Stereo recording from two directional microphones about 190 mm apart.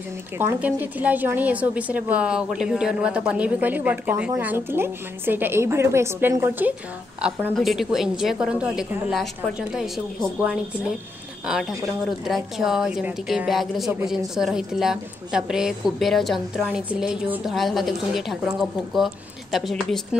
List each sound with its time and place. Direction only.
0.4 s a woman's voice: 10° right (ahead or behind)